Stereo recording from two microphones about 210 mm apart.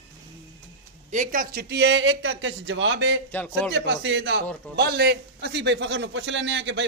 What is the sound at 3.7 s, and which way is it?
A man's voice, 60° right (ahead or behind).